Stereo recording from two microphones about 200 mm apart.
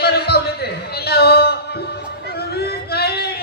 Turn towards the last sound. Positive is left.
turn(degrees=55)  # may be behind; listen again after turning